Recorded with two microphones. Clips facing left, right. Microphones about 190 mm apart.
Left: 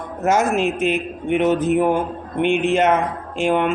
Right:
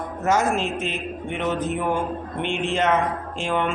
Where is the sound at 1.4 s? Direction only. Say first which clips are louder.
Left 8 dB; 15° left (ahead or behind).